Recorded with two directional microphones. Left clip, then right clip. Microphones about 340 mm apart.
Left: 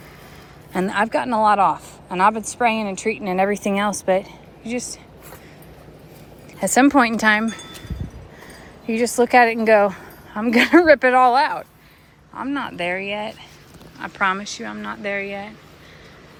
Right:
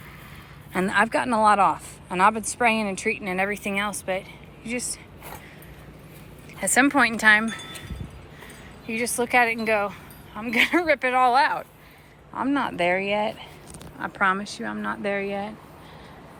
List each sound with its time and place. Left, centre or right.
0.7 s speech: centre
6.6 s speech: centre
8.9 s a woman's voice: left; by 15.5 s centre